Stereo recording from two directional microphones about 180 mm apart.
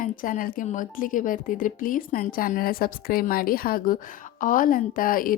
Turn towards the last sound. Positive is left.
turn(degrees=50)  # may be behind; listen again after turning